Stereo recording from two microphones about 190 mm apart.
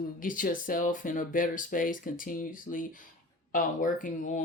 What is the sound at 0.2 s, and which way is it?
Speech, 45° left (ahead or behind).